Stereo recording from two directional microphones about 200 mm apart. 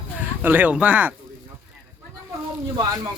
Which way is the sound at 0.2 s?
10° right (ahead or behind).